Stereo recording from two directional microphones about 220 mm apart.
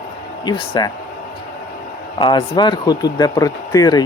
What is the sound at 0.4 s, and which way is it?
Speech, 20° left (ahead or behind).